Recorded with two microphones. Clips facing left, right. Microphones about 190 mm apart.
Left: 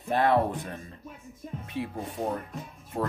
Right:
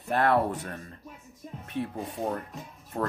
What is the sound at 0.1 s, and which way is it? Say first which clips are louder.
Speech: left 1 dB; 15° left (ahead or behind).